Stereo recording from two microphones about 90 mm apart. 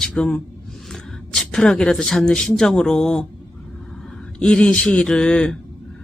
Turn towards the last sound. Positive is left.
turn(degrees=10)  # may be behind; listen again after turning